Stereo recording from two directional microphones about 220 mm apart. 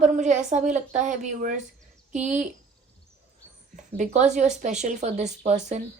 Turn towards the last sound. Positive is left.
turn(degrees=-30)  # may be behind; listen again after turning